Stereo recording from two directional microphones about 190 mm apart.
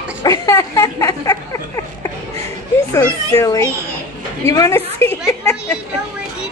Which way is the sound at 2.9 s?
15° left (ahead or behind).